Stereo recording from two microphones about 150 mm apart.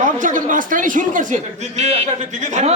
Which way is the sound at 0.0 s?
60° right (ahead or behind).